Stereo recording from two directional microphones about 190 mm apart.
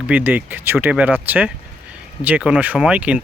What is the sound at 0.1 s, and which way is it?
Speech, 10° right (ahead or behind).